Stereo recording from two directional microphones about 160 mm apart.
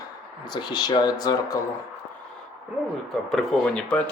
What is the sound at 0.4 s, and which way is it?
Speech, 25° left (ahead or behind).